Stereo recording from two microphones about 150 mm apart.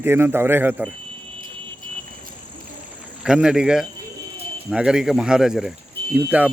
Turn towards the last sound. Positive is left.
turn(degrees=-10)  # may be behind; listen again after turning